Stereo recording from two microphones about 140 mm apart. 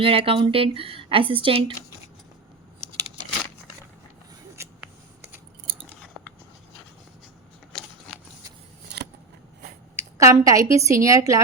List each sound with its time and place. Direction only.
0.0 s speech: 40° right (ahead or behind)
9.9 s a woman's voice: 20° right (ahead or behind)